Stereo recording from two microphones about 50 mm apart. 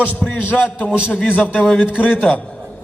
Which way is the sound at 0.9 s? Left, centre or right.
Right.